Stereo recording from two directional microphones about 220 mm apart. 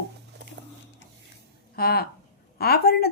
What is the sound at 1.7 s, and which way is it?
A woman's voice, 45° left (ahead or behind).